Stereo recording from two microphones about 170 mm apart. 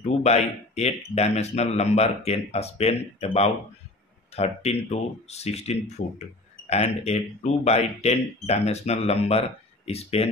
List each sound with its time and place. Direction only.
0.0 s speech: 40° left (ahead or behind)